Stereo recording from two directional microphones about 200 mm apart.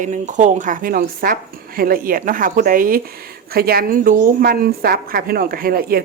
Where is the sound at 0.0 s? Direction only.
40° right (ahead or behind).